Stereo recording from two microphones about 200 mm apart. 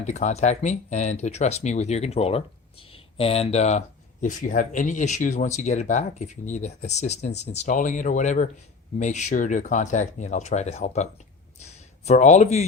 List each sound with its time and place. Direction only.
0.0 s speech: 35° left (ahead or behind)